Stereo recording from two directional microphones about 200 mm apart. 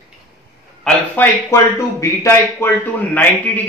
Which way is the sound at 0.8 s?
10° left (ahead or behind).